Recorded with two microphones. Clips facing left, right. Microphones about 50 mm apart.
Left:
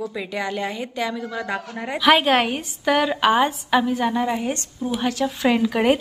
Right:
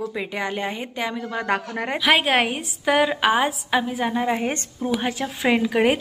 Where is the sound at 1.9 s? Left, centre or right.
Centre.